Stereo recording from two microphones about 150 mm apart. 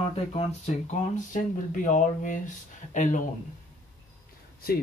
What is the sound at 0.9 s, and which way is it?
Speech, 60° left (ahead or behind).